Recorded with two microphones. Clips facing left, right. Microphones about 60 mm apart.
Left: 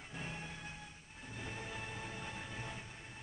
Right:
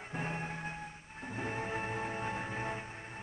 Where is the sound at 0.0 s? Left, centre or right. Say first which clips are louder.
Right 8 dB; right.